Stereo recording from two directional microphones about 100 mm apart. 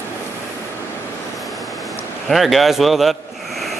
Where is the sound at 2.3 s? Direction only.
Centre (ahead or behind).